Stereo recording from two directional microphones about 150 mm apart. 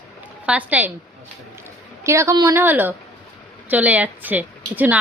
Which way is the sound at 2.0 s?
20° right (ahead or behind).